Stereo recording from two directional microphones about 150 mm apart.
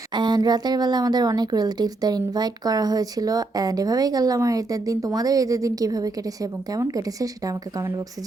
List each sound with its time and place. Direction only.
0.1 s speech: 30° right (ahead or behind)